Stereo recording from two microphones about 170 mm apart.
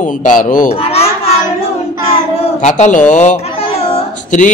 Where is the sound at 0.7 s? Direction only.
35° left (ahead or behind).